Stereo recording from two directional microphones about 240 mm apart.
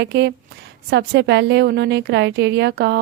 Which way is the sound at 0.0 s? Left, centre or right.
Right.